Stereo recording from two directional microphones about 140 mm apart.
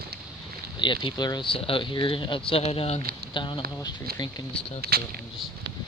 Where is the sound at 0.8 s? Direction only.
35° left (ahead or behind).